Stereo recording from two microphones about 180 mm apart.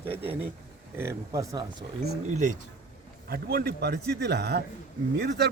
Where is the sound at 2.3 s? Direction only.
40° right (ahead or behind).